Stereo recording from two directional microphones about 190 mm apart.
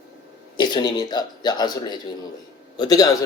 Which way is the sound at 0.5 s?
25° left (ahead or behind).